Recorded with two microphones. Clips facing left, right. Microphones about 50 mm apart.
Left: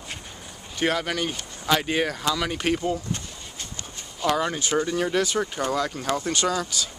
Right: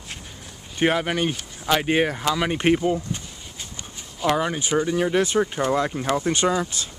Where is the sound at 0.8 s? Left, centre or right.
Right.